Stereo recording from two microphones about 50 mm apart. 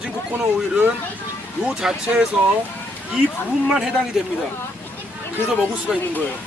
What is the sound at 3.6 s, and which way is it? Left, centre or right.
Speech, centre.